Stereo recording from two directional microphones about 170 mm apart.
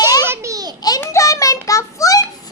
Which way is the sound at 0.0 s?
20° left (ahead or behind).